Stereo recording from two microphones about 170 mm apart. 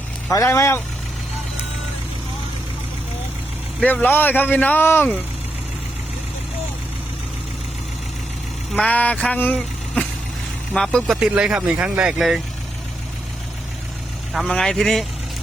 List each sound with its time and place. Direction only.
0.3 s speech: 15° left (ahead or behind)
3.8 s speech: 10° left (ahead or behind)
8.7 s speech: 5° left (ahead or behind)
14.3 s speech: 5° left (ahead or behind)